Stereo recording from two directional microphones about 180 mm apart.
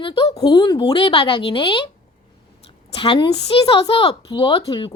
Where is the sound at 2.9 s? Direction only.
30° left (ahead or behind).